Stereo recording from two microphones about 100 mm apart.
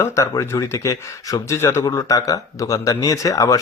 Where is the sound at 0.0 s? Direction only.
30° left (ahead or behind).